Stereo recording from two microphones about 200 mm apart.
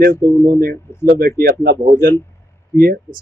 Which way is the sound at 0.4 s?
50° right (ahead or behind).